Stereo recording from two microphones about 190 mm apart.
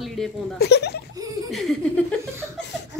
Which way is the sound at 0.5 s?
60° left (ahead or behind).